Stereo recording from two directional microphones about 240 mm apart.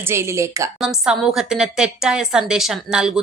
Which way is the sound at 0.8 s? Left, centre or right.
Centre.